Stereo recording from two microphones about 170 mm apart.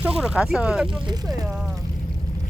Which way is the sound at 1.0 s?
25° right (ahead or behind).